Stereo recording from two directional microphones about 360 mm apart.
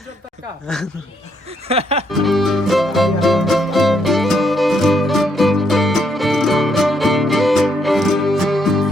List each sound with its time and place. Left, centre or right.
0.7 s speech: centre
1.6 s music: centre
2.0 s music: centre